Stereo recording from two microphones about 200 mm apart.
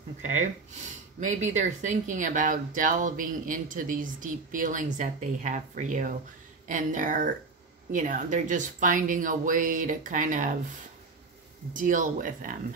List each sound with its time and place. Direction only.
0.2 s speech: 35° right (ahead or behind)
11.7 s speech: 40° right (ahead or behind)